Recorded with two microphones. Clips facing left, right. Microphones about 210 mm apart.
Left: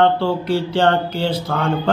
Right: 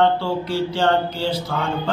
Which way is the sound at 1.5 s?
60° left (ahead or behind).